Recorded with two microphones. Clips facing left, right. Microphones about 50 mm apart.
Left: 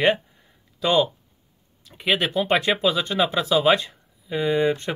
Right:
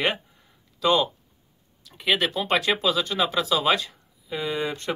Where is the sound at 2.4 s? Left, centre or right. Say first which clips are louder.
Left 2 dB; centre.